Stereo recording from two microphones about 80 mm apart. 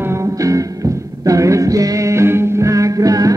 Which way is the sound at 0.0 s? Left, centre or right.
Right.